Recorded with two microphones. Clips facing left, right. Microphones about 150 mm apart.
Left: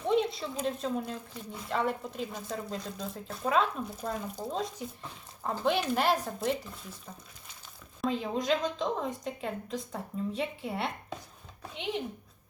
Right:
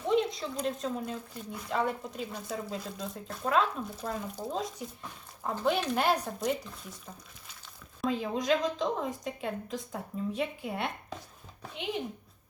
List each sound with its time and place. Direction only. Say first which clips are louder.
0.0 s a woman's voice: even; centre (ahead or behind)
8.0 s a woman's voice: right 1 dB; centre (ahead or behind)